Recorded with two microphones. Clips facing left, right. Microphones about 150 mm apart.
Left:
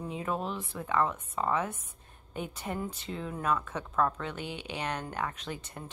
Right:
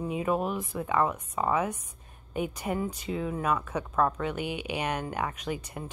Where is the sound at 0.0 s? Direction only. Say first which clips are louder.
Right 6 dB; 10° right (ahead or behind).